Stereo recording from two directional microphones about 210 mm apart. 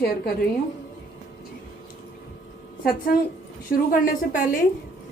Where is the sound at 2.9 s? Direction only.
45° left (ahead or behind).